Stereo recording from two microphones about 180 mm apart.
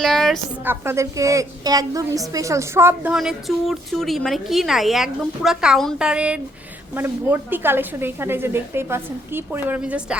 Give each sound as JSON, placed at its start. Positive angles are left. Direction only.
{"t": 0.0, "sound": "a woman's voice", "side_deg": 0}
{"t": 0.6, "sound": "a woman's voice", "side_deg": -15}